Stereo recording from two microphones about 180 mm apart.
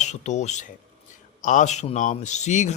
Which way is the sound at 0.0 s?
40° left (ahead or behind).